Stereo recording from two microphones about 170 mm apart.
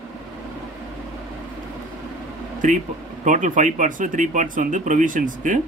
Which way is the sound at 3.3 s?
50° right (ahead or behind).